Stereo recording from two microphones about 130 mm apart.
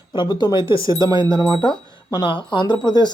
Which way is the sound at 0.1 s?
35° left (ahead or behind).